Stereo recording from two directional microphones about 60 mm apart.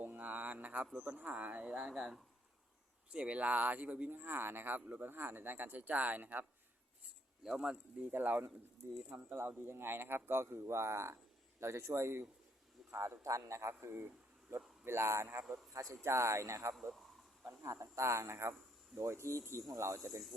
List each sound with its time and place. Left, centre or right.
0.0 s mantra: right
0.9 s speech: right
1.9 s speech: centre
3.1 s speech: centre
4.1 s speech: right
7.4 s speech: centre
8.1 s a man's voice: right
13.8 s speech: right
15.7 s a man's voice: right